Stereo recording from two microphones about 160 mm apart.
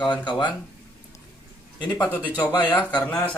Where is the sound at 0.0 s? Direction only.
30° left (ahead or behind).